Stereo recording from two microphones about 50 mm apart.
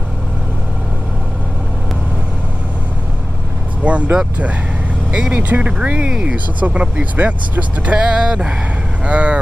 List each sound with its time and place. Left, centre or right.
3.8 s speech: right